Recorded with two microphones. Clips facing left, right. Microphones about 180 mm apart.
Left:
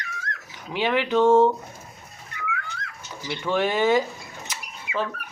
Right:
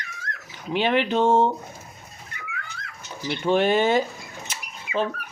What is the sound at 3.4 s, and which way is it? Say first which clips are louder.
Speech: right 2 dB; 25° right (ahead or behind).